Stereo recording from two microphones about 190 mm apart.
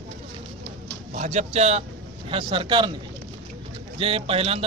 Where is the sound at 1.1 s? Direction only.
40° right (ahead or behind).